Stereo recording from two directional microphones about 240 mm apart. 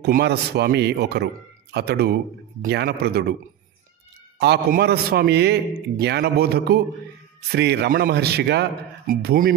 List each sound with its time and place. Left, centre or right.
0.0 s a man's voice: right
4.4 s a man's voice: right